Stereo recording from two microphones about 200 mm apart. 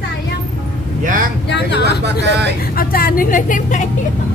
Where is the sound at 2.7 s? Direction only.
45° left (ahead or behind).